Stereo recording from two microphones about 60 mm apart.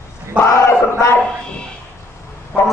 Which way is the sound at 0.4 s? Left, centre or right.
Left.